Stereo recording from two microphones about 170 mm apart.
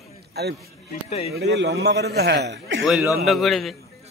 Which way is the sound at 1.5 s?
85° right.